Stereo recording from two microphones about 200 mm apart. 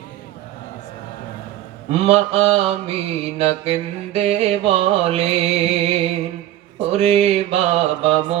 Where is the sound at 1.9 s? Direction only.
30° right (ahead or behind).